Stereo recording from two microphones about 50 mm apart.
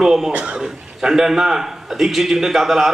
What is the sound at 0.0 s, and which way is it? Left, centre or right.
Speech, centre.